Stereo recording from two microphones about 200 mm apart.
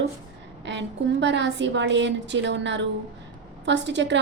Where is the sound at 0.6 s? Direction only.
60° right (ahead or behind).